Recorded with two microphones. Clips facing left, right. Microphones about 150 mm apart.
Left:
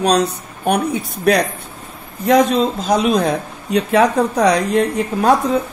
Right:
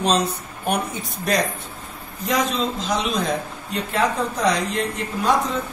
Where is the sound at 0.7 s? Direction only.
65° left (ahead or behind).